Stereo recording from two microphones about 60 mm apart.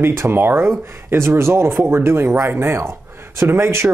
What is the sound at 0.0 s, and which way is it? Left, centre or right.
Speech, right.